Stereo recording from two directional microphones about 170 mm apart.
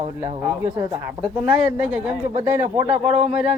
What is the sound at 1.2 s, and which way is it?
Speech, 5° right (ahead or behind).